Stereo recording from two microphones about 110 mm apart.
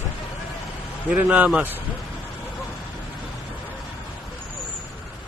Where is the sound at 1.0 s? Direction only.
15° right (ahead or behind).